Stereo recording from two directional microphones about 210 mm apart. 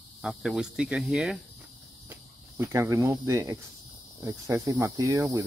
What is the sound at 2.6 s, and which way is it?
Speech, 15° right (ahead or behind).